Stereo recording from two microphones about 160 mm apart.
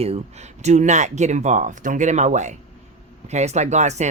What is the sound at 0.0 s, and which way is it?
Speech, 40° right (ahead or behind).